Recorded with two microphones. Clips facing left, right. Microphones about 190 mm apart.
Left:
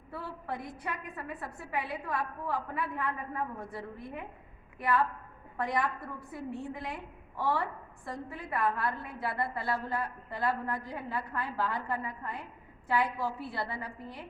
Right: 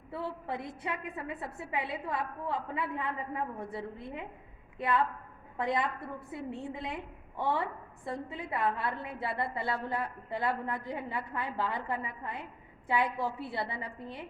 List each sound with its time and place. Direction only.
0.1 s a woman's voice: 25° right (ahead or behind)